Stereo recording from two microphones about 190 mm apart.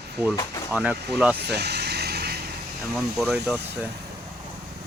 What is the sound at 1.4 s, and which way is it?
Vehicle, 60° right (ahead or behind).